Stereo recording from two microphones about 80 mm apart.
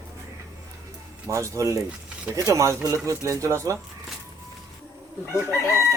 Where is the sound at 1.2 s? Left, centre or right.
Right.